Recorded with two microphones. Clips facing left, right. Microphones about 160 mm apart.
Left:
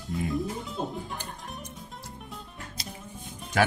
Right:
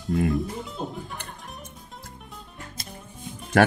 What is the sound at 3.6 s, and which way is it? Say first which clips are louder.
Speech: right 6 dB; 55° right (ahead or behind).